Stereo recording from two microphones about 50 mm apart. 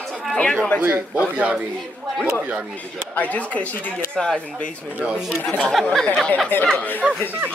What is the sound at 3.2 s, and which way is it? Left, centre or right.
Speech, left.